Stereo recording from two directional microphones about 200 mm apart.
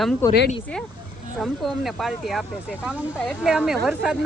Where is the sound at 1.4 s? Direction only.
Centre (ahead or behind).